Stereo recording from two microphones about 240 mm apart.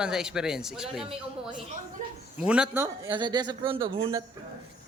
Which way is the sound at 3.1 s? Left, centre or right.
Centre.